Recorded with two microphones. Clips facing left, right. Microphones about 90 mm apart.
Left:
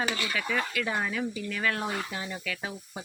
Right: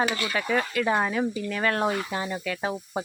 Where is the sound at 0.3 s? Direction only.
40° right (ahead or behind).